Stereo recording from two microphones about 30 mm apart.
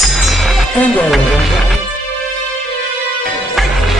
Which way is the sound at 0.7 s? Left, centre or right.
Left.